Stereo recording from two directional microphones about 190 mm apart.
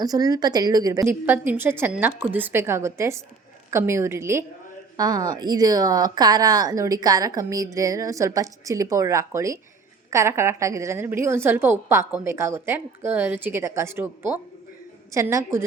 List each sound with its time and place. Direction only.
0.0 s a woman's voice: 20° right (ahead or behind)